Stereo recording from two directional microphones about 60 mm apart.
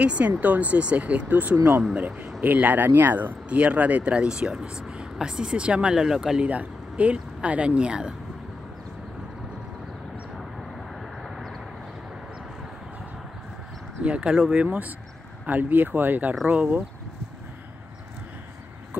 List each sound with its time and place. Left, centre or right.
0.0 s speech: right
3.4 s speech: right
6.5 s speech: right
11.2 s vehicle: centre
14.0 s speech: centre